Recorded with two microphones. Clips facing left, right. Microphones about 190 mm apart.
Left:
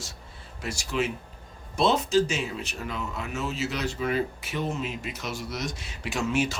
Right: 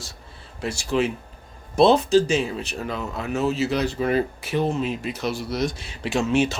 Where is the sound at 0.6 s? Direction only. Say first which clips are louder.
Right 6 dB; 30° right (ahead or behind).